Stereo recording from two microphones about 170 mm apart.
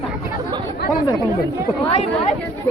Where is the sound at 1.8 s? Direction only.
40° left (ahead or behind).